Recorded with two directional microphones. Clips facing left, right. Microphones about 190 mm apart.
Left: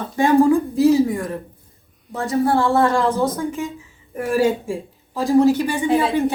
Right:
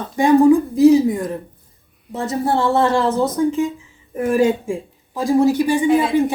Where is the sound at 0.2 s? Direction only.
15° right (ahead or behind).